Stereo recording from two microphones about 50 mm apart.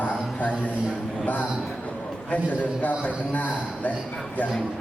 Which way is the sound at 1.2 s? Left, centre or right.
Left.